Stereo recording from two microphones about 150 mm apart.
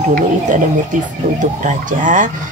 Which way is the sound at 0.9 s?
60° right (ahead or behind).